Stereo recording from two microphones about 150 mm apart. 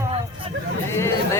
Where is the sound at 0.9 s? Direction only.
20° left (ahead or behind).